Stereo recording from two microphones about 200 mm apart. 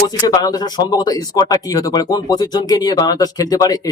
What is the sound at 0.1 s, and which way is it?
Speech, 20° left (ahead or behind).